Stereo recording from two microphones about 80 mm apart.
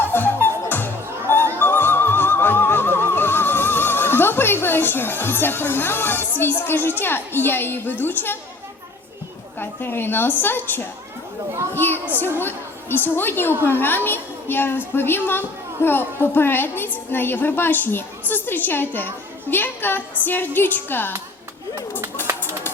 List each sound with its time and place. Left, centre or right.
0.1 s music: left
7.0 s a woman's voice: left
9.6 s a woman's voice: left
22.2 s a sound: left